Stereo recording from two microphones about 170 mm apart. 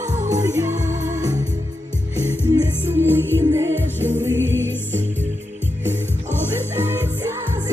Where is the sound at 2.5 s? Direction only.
15° right (ahead or behind).